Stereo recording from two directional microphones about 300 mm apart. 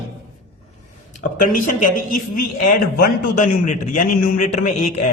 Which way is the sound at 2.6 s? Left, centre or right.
Left.